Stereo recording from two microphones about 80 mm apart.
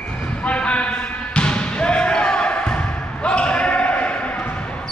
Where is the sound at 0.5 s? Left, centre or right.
Centre.